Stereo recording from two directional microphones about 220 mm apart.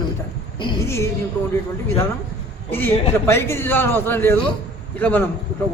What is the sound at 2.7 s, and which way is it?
A man's voice, 10° left (ahead or behind).